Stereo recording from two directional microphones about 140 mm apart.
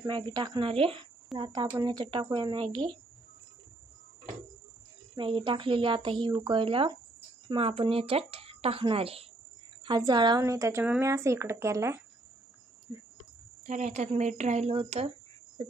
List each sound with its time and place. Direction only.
0.0 s speech: 30° right (ahead or behind)
5.1 s a woman's voice: 40° right (ahead or behind)
9.8 s speech: 30° right (ahead or behind)
12.9 s cricket: 25° right (ahead or behind)
13.7 s speech: 60° right (ahead or behind)